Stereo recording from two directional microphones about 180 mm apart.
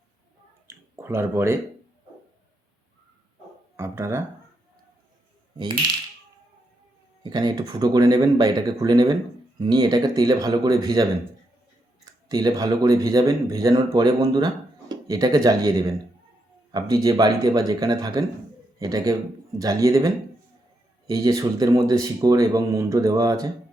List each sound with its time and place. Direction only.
0.7 s a sound: 15° right (ahead or behind)
3.8 s speech: 15° right (ahead or behind)
7.2 s speech: 25° right (ahead or behind)
12.3 s speech: 20° right (ahead or behind)